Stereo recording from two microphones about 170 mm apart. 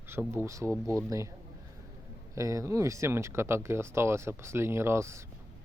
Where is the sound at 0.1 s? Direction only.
15° right (ahead or behind).